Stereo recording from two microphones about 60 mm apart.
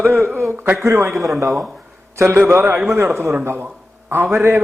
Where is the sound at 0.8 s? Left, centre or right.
Right.